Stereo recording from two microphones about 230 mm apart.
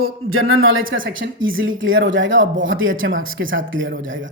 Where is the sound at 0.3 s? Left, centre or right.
Right.